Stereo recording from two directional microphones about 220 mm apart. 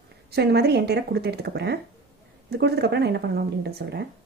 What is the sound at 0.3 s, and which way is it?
Speech, 45° right (ahead or behind).